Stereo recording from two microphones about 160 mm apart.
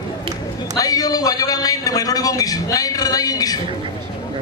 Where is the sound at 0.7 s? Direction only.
25° left (ahead or behind).